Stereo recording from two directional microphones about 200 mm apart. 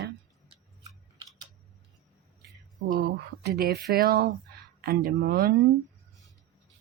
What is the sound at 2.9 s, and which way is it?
Speech, 50° right (ahead or behind).